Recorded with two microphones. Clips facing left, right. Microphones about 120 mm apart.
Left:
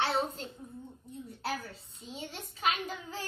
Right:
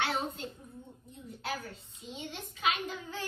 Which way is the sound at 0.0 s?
35° left (ahead or behind).